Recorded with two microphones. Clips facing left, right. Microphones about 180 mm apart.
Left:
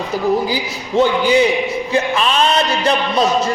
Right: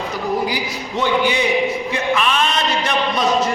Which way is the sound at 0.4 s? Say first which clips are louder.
Left 1 dB; 30° left (ahead or behind).